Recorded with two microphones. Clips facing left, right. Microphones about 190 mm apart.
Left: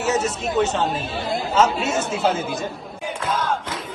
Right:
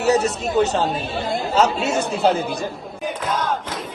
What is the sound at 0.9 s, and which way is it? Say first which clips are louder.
Speech: right 1 dB; centre (ahead or behind).